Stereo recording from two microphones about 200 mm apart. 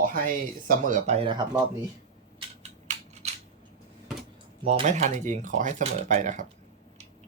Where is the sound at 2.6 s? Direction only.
35° right (ahead or behind).